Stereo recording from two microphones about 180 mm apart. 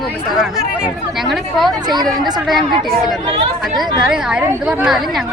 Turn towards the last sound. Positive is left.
turn(degrees=-5)  # may be behind; listen again after turning